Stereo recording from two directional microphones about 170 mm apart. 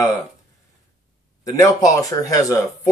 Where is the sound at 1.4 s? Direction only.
20° left (ahead or behind).